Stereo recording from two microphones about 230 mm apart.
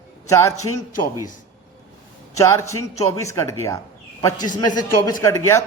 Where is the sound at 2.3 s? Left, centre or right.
Centre.